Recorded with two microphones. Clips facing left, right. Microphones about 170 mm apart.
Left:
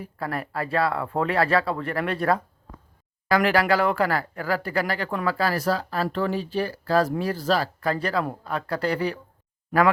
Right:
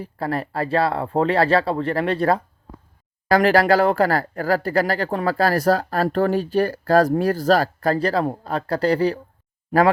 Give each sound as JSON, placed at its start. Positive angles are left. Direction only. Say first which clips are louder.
{"t": 0.0, "sound": "speech", "louder": "right 5 dB", "side_deg": -30}